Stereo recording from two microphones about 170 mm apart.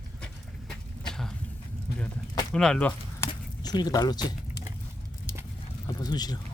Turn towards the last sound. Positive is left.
turn(degrees=25)  # may be behind; listen again after turning